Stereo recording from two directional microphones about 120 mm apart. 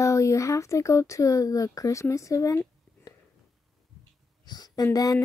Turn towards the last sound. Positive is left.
turn(degrees=30)  # may be behind; listen again after turning